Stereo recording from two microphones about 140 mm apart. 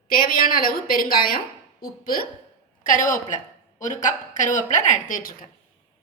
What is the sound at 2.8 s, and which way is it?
A woman's voice, 70° left (ahead or behind).